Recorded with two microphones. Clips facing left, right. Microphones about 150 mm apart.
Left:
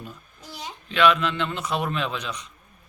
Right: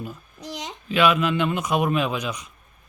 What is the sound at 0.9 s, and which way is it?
A man's voice, 10° right (ahead or behind).